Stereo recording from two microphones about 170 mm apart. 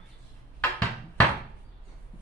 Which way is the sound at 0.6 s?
10° left (ahead or behind).